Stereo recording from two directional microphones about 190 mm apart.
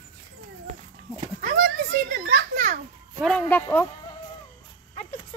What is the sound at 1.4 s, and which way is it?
Children playing, 50° right (ahead or behind).